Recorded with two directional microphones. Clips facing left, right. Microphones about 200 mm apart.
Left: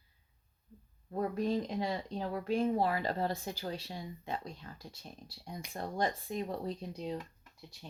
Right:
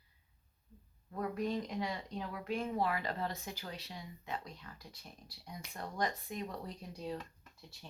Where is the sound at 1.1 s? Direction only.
30° left (ahead or behind).